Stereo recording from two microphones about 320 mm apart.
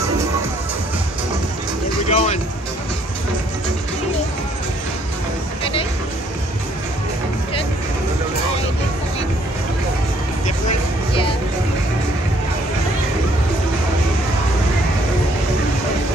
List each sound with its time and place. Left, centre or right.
2.0 s music: centre
5.6 s music: centre